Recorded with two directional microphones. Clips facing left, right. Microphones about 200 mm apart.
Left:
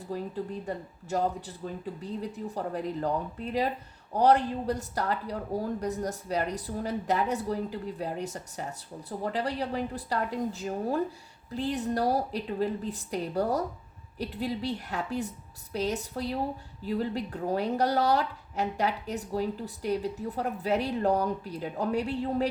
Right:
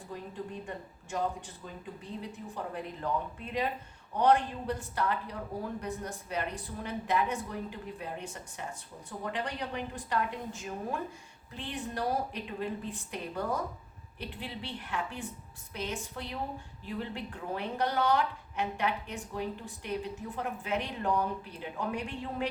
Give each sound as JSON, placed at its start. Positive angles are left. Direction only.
{"t": 0.1, "sound": "speech", "side_deg": 35}